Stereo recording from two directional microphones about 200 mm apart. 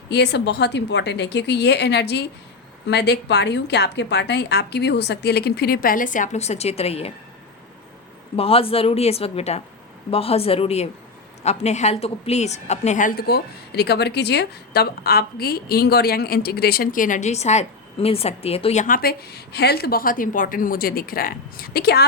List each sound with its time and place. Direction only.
0.1 s a woman's voice: 55° left (ahead or behind); by 7.1 s 30° left (ahead or behind)
8.4 s a woman's voice: 30° left (ahead or behind); by 22.0 s 50° left (ahead or behind)